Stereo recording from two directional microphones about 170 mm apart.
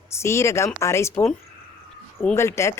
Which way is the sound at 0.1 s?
15° left (ahead or behind).